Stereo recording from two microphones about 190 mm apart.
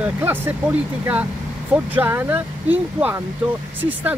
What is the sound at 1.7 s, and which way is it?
Speech, 10° right (ahead or behind).